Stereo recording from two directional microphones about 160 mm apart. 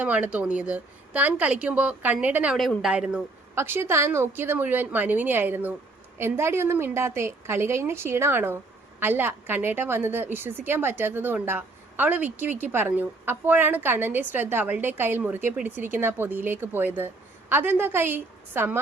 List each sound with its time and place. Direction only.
0.0 s a woman's voice: 10° right (ahead or behind)
3.5 s a woman's voice: 15° right (ahead or behind)